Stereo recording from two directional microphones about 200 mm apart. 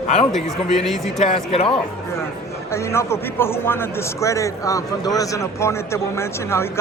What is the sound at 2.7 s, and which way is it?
A man's voice, 15° left (ahead or behind).